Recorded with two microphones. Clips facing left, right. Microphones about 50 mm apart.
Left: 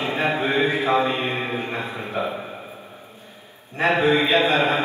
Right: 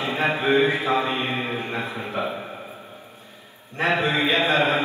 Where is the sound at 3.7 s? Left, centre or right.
Left.